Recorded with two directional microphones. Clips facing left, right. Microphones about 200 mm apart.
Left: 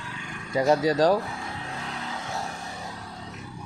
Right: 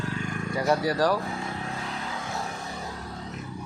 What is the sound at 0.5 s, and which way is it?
Speech, 20° left (ahead or behind).